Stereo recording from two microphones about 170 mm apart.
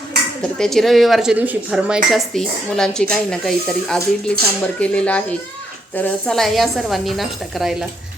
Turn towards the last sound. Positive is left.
turn(degrees=0)  # may be behind; listen again after turning